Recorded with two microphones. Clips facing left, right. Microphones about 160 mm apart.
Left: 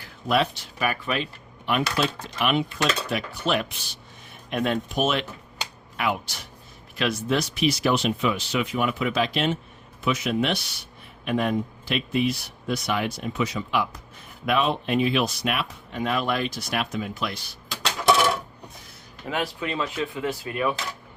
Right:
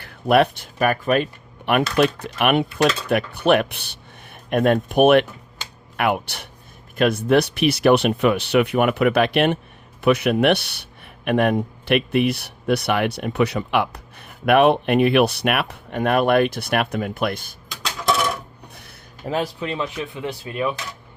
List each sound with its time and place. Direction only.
0.0 s a man's voice: 60° right (ahead or behind)
17.7 s coin: centre (ahead or behind)
18.7 s a sound: 65° right (ahead or behind)
19.2 s speech: 30° right (ahead or behind)
20.2 s speech: 20° right (ahead or behind)